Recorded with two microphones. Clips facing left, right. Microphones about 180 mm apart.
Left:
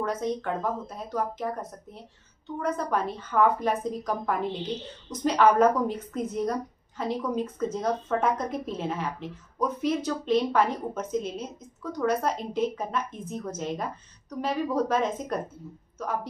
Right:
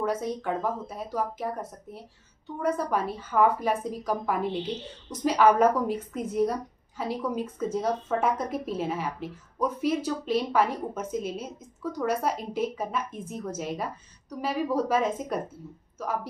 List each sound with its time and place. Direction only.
0.0 s a woman's voice: 10° right (ahead or behind)